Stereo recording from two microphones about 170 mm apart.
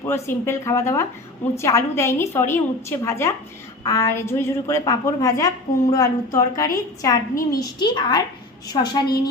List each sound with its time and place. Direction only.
0.0 s a woman's voice: 15° left (ahead or behind)